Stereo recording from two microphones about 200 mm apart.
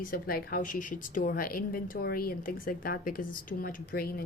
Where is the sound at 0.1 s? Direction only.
45° left (ahead or behind).